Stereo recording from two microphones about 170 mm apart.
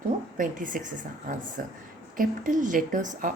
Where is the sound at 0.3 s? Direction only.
50° right (ahead or behind).